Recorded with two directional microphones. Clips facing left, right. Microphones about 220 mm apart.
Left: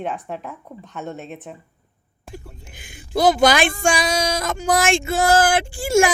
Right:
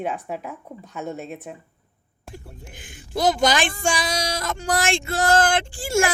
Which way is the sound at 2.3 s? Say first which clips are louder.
Left 2 dB; 10° left (ahead or behind).